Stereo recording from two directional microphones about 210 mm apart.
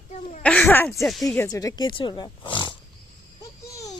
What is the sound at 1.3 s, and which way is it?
Speech, 15° left (ahead or behind).